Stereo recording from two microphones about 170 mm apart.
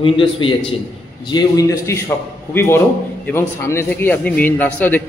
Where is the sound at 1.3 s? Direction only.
20° left (ahead or behind).